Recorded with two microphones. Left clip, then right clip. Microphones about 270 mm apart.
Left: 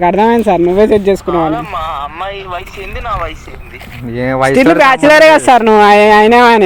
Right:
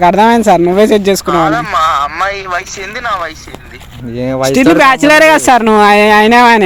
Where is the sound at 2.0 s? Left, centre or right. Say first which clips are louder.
Right 7 dB; right.